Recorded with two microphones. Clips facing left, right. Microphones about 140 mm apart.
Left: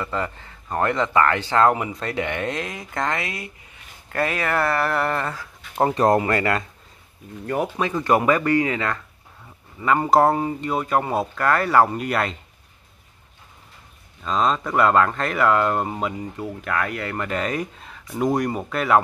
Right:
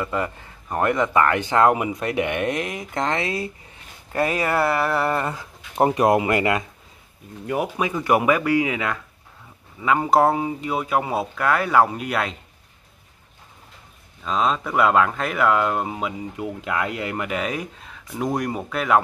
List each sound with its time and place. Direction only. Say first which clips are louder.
0.0 s speech: right 1 dB; 15° right (ahead or behind)
4.1 s speech: right 2 dB; 15° right (ahead or behind)
5.2 s speech: right 1 dB; 15° right (ahead or behind); by 12.4 s centre (ahead or behind)
14.2 s speech: left 1 dB; 5° right (ahead or behind)
16.3 s speech: right 2 dB; 15° right (ahead or behind); by 18.9 s centre (ahead or behind)